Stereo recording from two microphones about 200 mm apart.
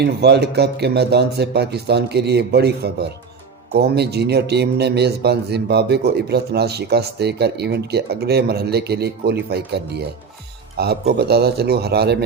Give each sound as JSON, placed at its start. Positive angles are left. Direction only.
{"t": 0.0, "sound": "speech", "side_deg": -55}